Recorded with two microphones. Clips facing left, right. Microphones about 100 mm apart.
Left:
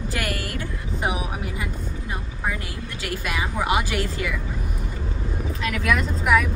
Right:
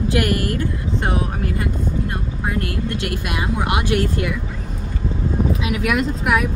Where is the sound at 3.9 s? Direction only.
55° right (ahead or behind).